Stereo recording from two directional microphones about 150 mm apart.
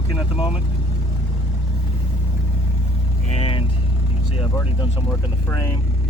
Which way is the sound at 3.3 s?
40° left (ahead or behind).